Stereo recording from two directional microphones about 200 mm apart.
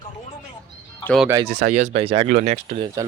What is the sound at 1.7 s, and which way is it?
Speech, 35° right (ahead or behind).